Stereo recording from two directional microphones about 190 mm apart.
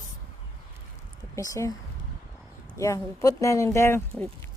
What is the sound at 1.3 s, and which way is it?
Speech, 15° left (ahead or behind).